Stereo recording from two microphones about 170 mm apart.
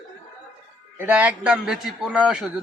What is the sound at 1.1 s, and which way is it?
Speech, 10° right (ahead or behind).